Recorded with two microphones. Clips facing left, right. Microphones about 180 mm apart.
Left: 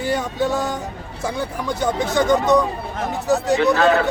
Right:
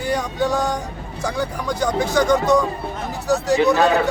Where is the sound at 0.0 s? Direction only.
Centre (ahead or behind).